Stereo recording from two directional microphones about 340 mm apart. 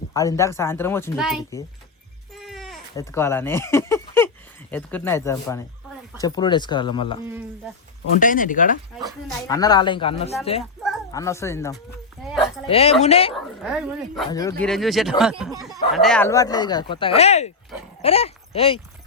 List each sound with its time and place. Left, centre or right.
0.1 s speech: centre
2.3 s sheep: centre
2.9 s speech: centre
8.2 s speech: left
9.5 s speech: centre
10.8 s dog: centre
12.6 s speech: centre
13.3 s speech: centre
14.3 s speech: centre